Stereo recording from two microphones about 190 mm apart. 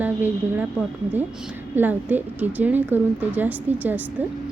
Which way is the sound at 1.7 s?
10° right (ahead or behind).